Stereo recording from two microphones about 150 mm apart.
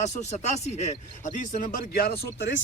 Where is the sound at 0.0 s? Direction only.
50° left (ahead or behind).